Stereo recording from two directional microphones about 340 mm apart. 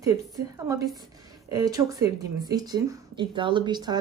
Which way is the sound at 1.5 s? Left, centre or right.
Centre.